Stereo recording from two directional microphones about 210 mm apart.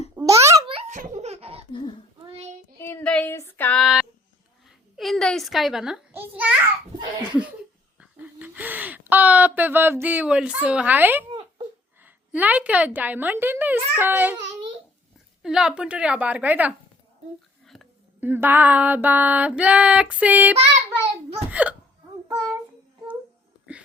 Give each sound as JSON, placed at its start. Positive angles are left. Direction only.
{"t": 0.2, "sound": "a sound", "side_deg": -15}
{"t": 0.7, "sound": "baby laughter", "side_deg": -35}
{"t": 1.7, "sound": "babbling", "side_deg": 25}
{"t": 2.7, "sound": "child singing", "side_deg": 10}
{"t": 4.9, "sound": "a sound", "side_deg": 0}
{"t": 7.9, "sound": "a sound", "side_deg": -10}
{"t": 12.0, "sound": "female singing", "side_deg": -5}
{"t": 15.4, "sound": "a woman's voice", "side_deg": -5}
{"t": 18.2, "sound": "female singing", "side_deg": -10}
{"t": 21.5, "sound": "hiccup", "side_deg": -5}